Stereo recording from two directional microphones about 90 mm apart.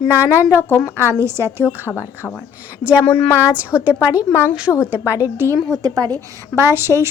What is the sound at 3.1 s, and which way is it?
Speech, 15° left (ahead or behind).